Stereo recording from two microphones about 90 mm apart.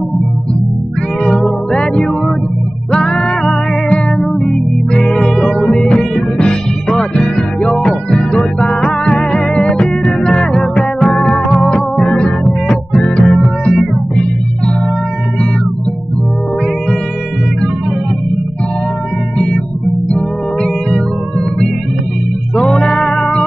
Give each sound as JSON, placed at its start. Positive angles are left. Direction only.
{"t": 1.2, "sound": "music", "side_deg": 5}
{"t": 2.9, "sound": "music", "side_deg": 10}
{"t": 11.3, "sound": "music", "side_deg": 5}
{"t": 20.1, "sound": "music", "side_deg": 10}
{"t": 22.6, "sound": "music", "side_deg": 10}